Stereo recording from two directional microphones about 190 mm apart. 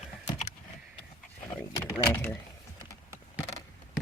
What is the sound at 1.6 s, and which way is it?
Vehicle, 15° left (ahead or behind).